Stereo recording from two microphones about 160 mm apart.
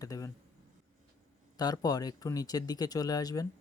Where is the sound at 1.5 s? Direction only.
25° left (ahead or behind).